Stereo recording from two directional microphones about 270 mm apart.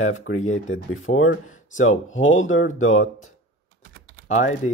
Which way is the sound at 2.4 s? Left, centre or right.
Left.